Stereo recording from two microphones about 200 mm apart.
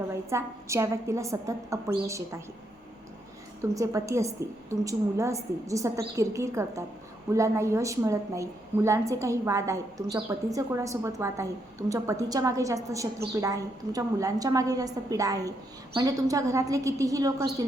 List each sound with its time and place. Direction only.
0.1 s a woman's voice: 15° right (ahead or behind)
3.6 s a woman's voice: 15° right (ahead or behind)